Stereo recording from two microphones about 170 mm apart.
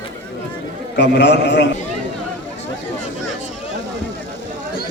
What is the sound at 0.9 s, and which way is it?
Speech, 90° left.